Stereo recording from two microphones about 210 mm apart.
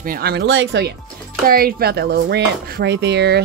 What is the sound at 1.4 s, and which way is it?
Speech, 45° right (ahead or behind).